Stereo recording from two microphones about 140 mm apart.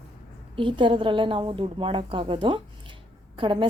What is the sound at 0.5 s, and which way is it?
A woman's voice, 35° right (ahead or behind).